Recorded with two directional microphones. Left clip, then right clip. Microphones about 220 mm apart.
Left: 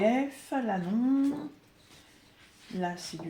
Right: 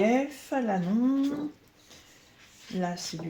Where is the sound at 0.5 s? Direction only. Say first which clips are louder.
Right 3 dB; 40° right (ahead or behind).